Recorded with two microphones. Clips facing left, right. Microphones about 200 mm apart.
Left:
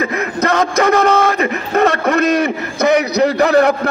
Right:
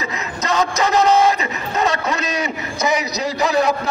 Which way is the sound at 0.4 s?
55° left (ahead or behind).